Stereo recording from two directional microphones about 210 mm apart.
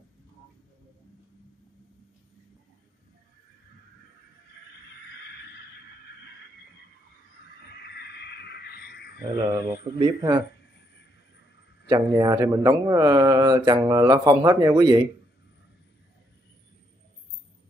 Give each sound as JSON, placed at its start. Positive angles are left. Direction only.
{"t": 7.4, "sound": "a sound", "side_deg": 50}
{"t": 9.4, "sound": "speech", "side_deg": -15}
{"t": 11.9, "sound": "speech", "side_deg": -20}